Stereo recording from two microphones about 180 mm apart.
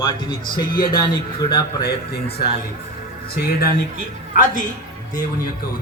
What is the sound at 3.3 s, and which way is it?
A man's voice, 60° left (ahead or behind).